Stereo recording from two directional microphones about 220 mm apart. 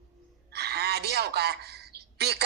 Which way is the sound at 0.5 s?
45° right (ahead or behind).